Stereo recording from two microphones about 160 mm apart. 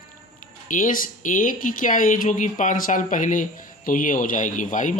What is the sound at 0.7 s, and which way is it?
Speech, 55° left (ahead or behind).